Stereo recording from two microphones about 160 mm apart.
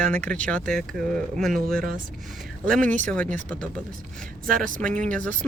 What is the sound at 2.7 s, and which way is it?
Speech, 10° left (ahead or behind).